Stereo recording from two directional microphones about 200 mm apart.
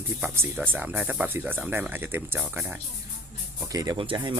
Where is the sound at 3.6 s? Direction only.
20° right (ahead or behind).